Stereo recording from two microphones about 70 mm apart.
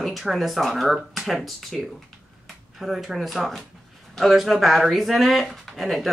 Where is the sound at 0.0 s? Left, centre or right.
Centre.